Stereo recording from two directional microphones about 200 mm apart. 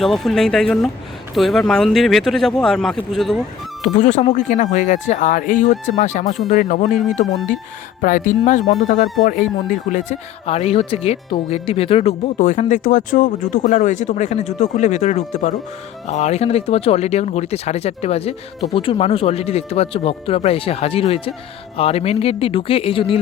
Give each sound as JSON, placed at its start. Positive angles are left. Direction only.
{"t": 0.0, "sound": "speech", "side_deg": 0}
{"t": 3.8, "sound": "speech", "side_deg": 35}
{"t": 6.9, "sound": "speech", "side_deg": 0}
{"t": 8.0, "sound": "speech", "side_deg": 40}